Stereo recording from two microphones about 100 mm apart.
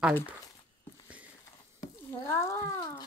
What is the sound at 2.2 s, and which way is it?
Speech, 30° left (ahead or behind).